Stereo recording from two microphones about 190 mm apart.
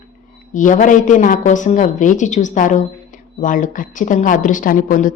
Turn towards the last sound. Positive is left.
turn(degrees=45)  # may be behind; listen again after turning